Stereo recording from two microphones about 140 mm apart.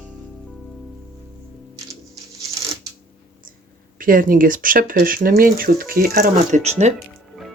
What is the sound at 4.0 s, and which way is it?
Speech, 85° right.